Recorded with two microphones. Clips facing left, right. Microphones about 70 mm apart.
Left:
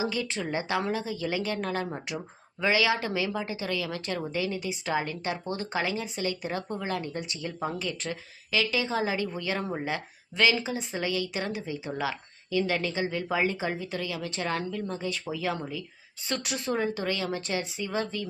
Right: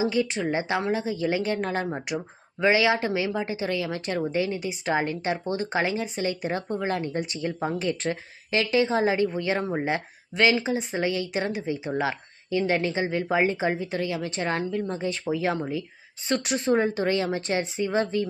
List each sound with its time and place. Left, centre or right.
0.0 s speech: right